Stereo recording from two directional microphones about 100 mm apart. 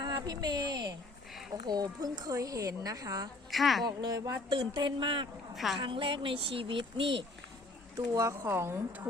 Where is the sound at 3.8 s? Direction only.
45° right (ahead or behind); by 6.9 s 60° right (ahead or behind).